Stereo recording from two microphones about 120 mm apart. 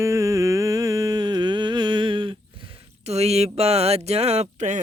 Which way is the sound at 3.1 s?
65° right (ahead or behind).